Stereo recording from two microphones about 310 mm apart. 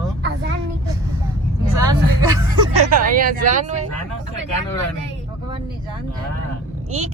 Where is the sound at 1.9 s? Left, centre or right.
Centre.